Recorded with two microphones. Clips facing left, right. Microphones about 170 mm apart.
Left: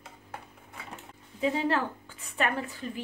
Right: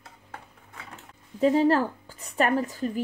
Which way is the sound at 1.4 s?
40° right (ahead or behind).